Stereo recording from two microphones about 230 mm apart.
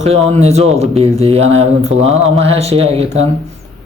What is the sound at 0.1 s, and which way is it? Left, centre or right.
Speech, right.